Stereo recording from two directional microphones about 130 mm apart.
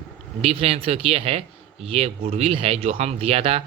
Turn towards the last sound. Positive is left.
turn(degrees=-50)  # may be behind; listen again after turning